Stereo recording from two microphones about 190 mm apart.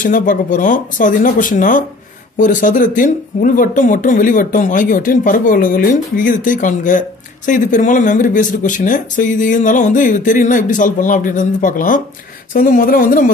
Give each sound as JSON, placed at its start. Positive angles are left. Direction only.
{"t": 0.0, "sound": "speech", "side_deg": 45}